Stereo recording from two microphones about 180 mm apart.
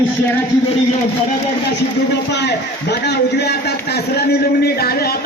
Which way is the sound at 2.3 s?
70° left (ahead or behind).